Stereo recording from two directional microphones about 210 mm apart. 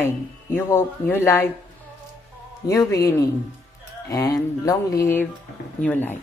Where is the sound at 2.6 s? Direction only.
15° left (ahead or behind).